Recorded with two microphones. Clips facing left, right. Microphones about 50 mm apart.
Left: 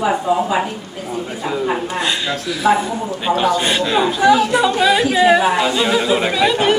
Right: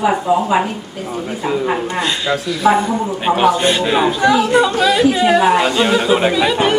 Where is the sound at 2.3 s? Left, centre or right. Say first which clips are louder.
Right 3 dB; centre.